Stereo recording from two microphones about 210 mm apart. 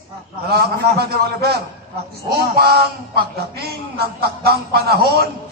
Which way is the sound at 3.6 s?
50° right (ahead or behind).